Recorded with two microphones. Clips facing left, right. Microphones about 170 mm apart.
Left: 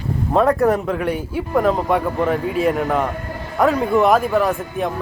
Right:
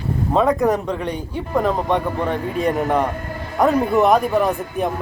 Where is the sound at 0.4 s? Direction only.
15° right (ahead or behind).